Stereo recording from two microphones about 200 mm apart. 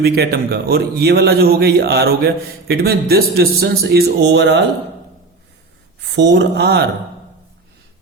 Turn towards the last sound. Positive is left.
turn(degrees=-55)  # may be behind; listen again after turning